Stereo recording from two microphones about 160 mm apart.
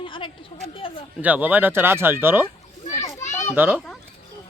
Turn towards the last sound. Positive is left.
turn(degrees=-10)  # may be behind; listen again after turning